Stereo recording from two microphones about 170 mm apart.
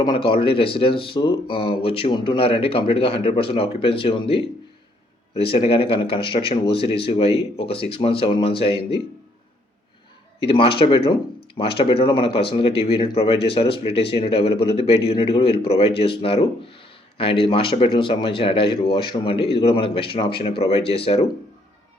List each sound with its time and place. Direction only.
0.0 s speech: 30° left (ahead or behind)
10.4 s speech: 30° left (ahead or behind)